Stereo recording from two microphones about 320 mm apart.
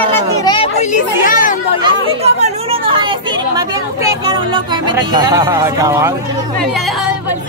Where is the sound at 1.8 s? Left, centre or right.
Centre.